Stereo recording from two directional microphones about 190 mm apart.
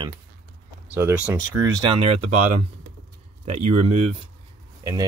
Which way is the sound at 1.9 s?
30° right (ahead or behind).